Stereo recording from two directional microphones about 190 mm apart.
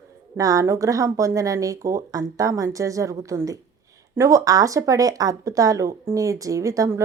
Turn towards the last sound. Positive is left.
turn(degrees=-15)  # may be behind; listen again after turning